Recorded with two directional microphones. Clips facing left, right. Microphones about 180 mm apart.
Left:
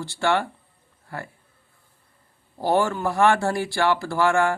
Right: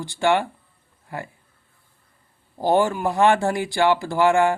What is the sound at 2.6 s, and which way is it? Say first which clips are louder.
Speech: right 2 dB; 20° right (ahead or behind).